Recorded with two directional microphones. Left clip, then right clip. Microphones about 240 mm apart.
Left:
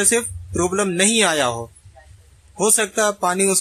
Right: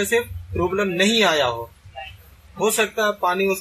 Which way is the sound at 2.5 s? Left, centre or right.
Left.